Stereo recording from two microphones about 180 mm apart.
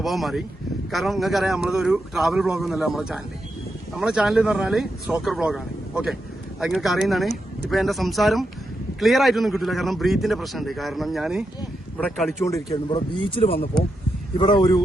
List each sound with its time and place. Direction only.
0.0 s a man's voice: centre (ahead or behind)
12.7 s speech: 25° left (ahead or behind)